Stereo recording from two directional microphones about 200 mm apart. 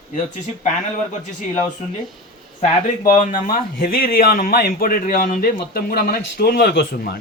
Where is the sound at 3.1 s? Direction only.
40° left (ahead or behind).